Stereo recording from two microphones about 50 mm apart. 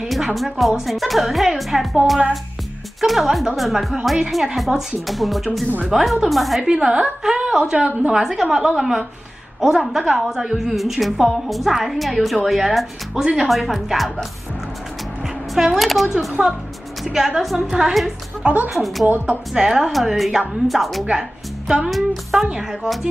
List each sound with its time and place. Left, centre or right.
0.1 s a woman's voice: centre
3.0 s a woman's voice: centre
6.7 s a woman's voice: centre
8.1 s a woman's voice: centre
13.1 s a woman's voice: centre
13.5 s a woman's voice: centre
15.5 s a woman's voice: centre
18.4 s a woman's voice: right
18.7 s a woman's voice: centre
21.1 s a woman's voice: centre
21.9 s a woman's voice: centre